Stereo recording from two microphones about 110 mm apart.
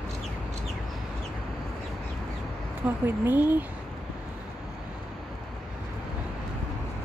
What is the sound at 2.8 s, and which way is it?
Speech, 20° right (ahead or behind).